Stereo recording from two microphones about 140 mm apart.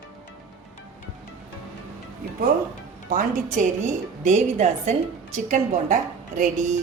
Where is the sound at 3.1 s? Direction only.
60° right (ahead or behind).